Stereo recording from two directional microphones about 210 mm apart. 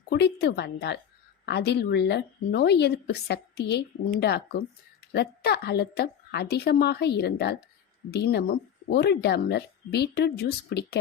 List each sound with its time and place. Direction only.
0.1 s a woman's voice: 55° left (ahead or behind)